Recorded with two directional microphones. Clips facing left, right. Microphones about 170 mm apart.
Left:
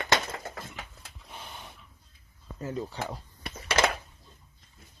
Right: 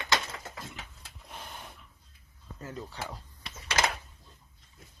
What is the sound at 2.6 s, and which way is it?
Speech, 20° left (ahead or behind).